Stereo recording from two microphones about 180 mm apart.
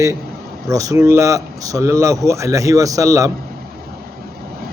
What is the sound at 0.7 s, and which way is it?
Speech, 20° right (ahead or behind).